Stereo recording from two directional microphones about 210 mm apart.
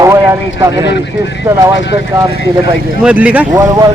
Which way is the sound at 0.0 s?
15° right (ahead or behind).